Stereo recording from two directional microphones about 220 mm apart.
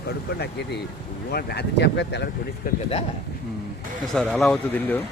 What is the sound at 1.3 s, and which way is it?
A man's voice, 45° left (ahead or behind).